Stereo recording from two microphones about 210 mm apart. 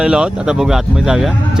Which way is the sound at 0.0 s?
5° right (ahead or behind).